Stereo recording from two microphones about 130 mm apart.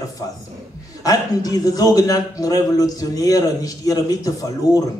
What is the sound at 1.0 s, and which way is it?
A man's voice, 30° left (ahead or behind).